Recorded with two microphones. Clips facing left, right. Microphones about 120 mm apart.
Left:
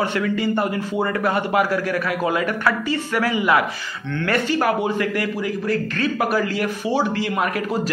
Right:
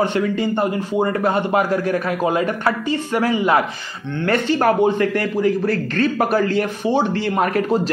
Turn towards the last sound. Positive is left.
turn(degrees=-30)  # may be behind; listen again after turning